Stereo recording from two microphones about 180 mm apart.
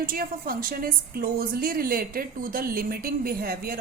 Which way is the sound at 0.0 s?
55° right (ahead or behind).